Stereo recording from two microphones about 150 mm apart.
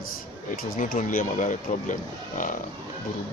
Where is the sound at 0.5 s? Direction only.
65° left (ahead or behind).